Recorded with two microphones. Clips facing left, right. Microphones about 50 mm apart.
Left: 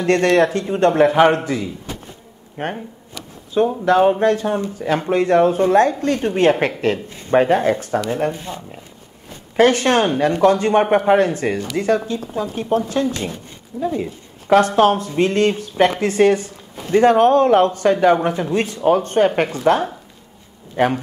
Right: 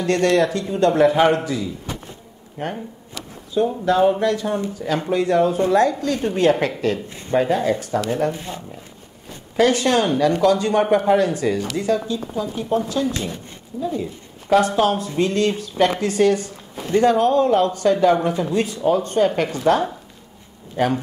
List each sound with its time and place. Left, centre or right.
0.0 s speech: left
9.6 s speech: left